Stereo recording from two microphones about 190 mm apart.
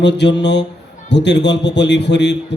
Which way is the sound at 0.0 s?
65° left (ahead or behind).